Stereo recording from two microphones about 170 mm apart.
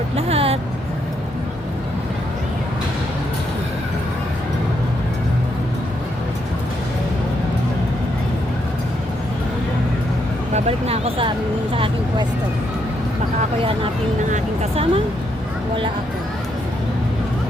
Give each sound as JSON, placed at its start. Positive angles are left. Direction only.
{"t": 0.2, "sound": "music", "side_deg": -35}
{"t": 10.5, "sound": "speech", "side_deg": -35}
{"t": 14.3, "sound": "a sound", "side_deg": -45}